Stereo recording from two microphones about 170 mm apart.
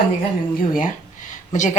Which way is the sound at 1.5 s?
45° left (ahead or behind).